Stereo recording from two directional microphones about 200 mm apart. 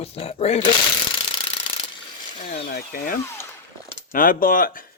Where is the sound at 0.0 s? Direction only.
30° left (ahead or behind).